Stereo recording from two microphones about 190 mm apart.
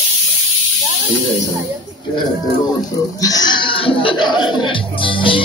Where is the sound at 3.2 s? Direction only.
20° left (ahead or behind).